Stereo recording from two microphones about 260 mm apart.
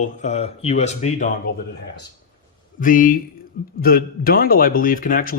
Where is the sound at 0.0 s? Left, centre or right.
Left.